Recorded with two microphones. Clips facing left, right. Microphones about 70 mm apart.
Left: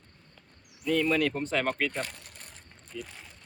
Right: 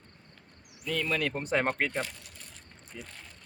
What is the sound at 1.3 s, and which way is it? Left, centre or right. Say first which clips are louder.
Speech: right 1 dB; centre.